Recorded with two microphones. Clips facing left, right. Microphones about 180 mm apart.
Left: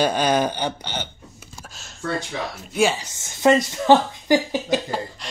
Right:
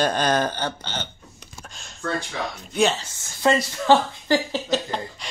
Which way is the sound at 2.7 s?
10° left (ahead or behind).